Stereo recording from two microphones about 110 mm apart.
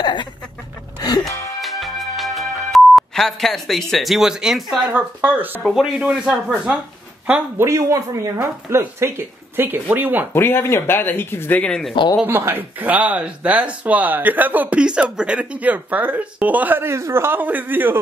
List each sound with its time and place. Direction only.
0.0 s chicken: 45° left (ahead or behind)
1.6 s music: centre (ahead or behind)
4.9 s speech: 15° right (ahead or behind)
5.6 s speech: centre (ahead or behind)
7.6 s speech: 25° right (ahead or behind)
10.3 s speech: 20° left (ahead or behind)
11.9 s speech: 45° left (ahead or behind)
12.3 s speech: 20° right (ahead or behind)